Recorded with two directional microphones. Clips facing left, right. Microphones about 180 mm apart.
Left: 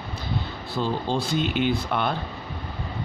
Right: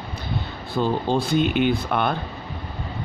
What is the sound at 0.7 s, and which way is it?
Speech, 55° right (ahead or behind).